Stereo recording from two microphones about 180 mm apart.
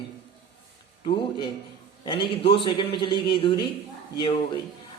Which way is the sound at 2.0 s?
30° left (ahead or behind).